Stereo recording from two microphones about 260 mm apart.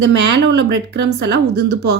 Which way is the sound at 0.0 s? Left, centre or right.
Right.